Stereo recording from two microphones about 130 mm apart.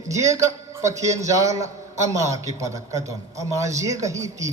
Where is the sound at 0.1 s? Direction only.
25° right (ahead or behind).